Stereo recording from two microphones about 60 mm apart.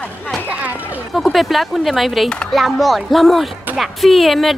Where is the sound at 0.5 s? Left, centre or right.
Right.